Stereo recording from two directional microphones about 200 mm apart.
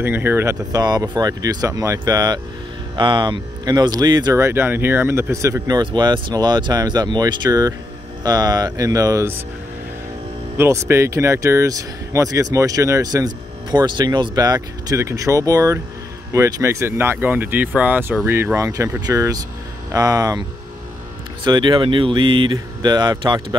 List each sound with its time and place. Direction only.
0.0 s speech: 10° right (ahead or behind)
10.6 s speech: 15° right (ahead or behind)
21.5 s speech: 25° right (ahead or behind)